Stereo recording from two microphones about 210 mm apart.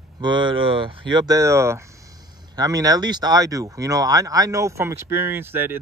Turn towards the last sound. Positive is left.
turn(degrees=-10)  # may be behind; listen again after turning